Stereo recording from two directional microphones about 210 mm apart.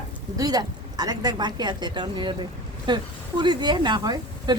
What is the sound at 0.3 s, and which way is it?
Speech, 20° right (ahead or behind).